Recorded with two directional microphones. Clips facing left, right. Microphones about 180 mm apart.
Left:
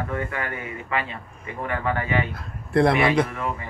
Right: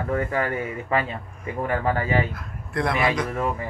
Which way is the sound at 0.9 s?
40° right (ahead or behind).